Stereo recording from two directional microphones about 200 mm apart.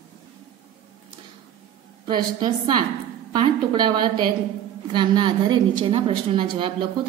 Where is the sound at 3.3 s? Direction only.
20° right (ahead or behind).